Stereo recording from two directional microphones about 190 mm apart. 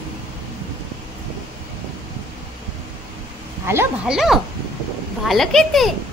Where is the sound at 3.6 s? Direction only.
15° right (ahead or behind).